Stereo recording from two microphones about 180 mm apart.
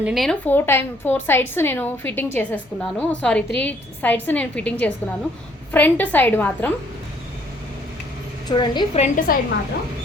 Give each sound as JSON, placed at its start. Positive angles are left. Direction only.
{"t": 0.0, "sound": "a woman's voice", "side_deg": 0}
{"t": 8.4, "sound": "a woman's voice", "side_deg": 25}
{"t": 9.0, "sound": "a woman's voice", "side_deg": 50}